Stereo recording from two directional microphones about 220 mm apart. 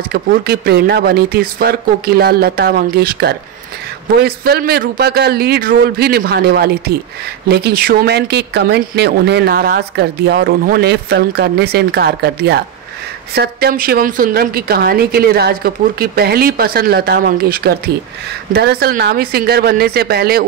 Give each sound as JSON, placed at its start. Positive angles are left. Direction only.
{"t": 0.1, "sound": "speech", "side_deg": -45}